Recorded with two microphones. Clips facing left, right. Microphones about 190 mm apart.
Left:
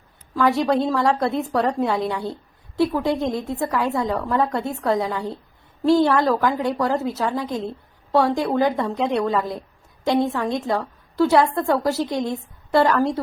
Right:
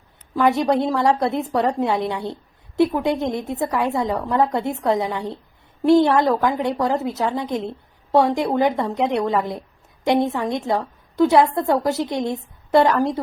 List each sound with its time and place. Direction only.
0.3 s a woman's voice: 20° right (ahead or behind)